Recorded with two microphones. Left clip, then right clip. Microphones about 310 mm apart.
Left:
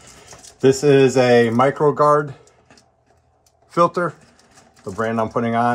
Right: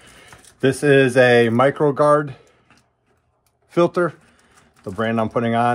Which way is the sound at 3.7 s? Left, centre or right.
Right.